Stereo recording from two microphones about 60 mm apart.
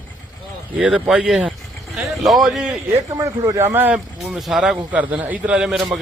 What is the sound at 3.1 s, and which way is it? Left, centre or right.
Speech, right.